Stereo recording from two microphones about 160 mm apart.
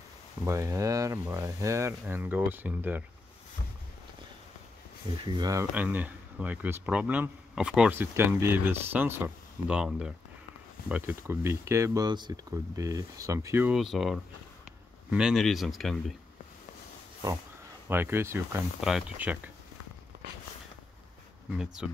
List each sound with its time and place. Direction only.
0.5 s speech: 20° right (ahead or behind)
5.2 s speech: 25° right (ahead or behind)
13.7 s speech: centre (ahead or behind)
17.8 s speech: 15° right (ahead or behind)
18.8 s speech: 5° right (ahead or behind)
21.5 s speech: 5° right (ahead or behind)